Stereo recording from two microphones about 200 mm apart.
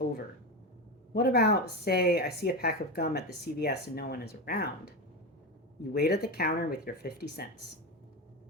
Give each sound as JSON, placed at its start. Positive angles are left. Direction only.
{"t": 1.1, "sound": "speech", "side_deg": 50}